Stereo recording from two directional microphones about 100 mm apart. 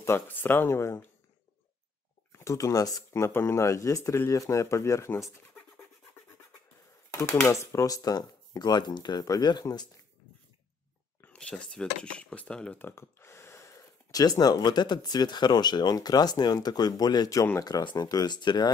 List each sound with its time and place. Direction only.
0.0 s speech: 20° left (ahead or behind)
2.3 s speech: 30° left (ahead or behind)
7.1 s speech: 30° left (ahead or behind)
11.3 s speech: 10° left (ahead or behind)
12.8 s speech: 25° left (ahead or behind); by 18.7 s 45° left (ahead or behind)